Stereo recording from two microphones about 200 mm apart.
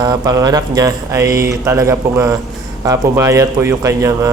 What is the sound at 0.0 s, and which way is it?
Speech, 20° right (ahead or behind).